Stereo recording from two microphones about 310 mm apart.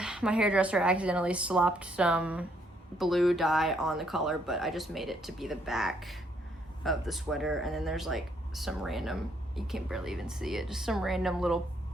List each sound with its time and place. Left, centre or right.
0.0 s speech: centre